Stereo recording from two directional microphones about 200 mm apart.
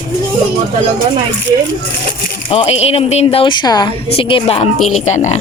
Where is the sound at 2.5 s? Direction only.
30° left (ahead or behind).